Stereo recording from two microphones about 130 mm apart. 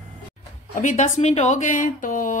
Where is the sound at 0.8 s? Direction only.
70° left (ahead or behind); by 2.3 s 90° left.